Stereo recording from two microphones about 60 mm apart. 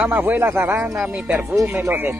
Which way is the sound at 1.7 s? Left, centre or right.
Right.